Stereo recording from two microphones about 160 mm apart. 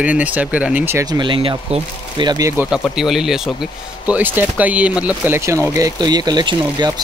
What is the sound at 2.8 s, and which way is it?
Speech, centre (ahead or behind).